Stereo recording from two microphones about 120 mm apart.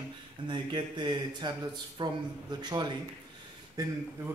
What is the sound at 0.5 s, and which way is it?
Speech, 40° right (ahead or behind).